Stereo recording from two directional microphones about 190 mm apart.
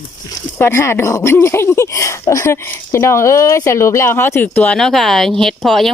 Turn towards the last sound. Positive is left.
turn(degrees=0)  # may be behind; listen again after turning